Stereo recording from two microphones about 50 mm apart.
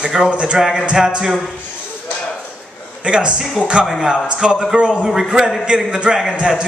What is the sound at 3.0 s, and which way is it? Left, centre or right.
A man's voice, right.